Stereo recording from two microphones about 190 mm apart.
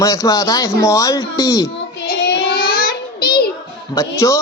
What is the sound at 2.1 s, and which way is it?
Child singing, 55° left (ahead or behind).